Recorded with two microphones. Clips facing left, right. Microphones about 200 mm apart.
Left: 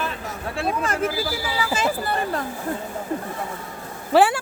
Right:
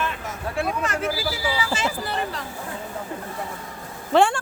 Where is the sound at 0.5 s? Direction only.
30° left (ahead or behind).